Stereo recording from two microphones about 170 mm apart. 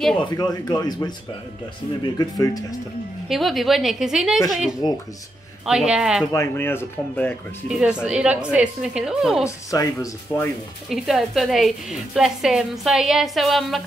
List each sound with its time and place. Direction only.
0.2 s speech: 25° left (ahead or behind)
2.1 s speech: 20° left (ahead or behind)
3.3 s speech: centre (ahead or behind)
6.3 s speech: 15° left (ahead or behind)
7.7 s speech: 5° right (ahead or behind)
9.7 s speech: 20° left (ahead or behind)
10.9 s speech: centre (ahead or behind)